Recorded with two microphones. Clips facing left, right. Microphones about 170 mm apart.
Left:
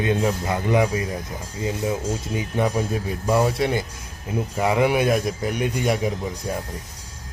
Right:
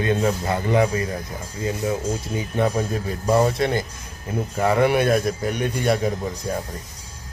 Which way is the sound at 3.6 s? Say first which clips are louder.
Even; 10° left (ahead or behind).